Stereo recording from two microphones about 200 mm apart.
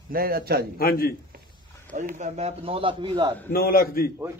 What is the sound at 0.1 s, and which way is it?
Speech, 50° right (ahead or behind).